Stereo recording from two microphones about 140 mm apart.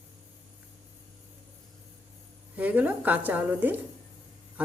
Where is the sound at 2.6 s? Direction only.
10° right (ahead or behind).